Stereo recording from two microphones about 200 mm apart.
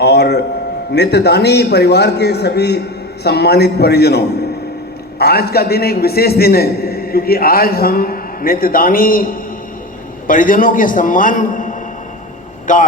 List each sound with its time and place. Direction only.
0.0 s a man's voice: 55° left (ahead or behind)
5.2 s a man's voice: 50° left (ahead or behind)